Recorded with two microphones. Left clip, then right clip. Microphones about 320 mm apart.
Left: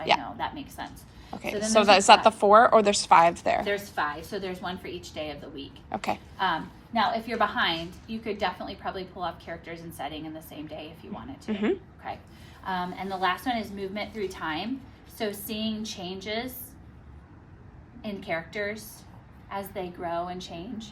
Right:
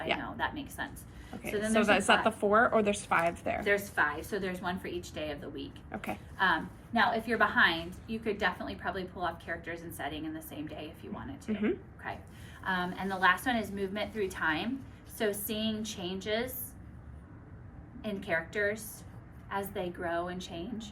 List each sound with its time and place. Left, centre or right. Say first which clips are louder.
0.0 s a woman's voice: left 7 dB; centre
18.0 s a woman's voice: left 1 dB; centre